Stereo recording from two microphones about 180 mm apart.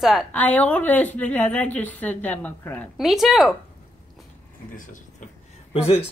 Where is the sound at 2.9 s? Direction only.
Centre (ahead or behind).